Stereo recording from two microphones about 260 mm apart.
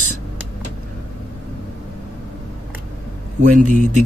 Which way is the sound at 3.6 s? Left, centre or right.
Right.